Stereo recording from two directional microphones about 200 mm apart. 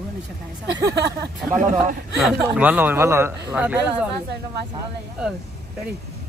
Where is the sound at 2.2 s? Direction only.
5° right (ahead or behind).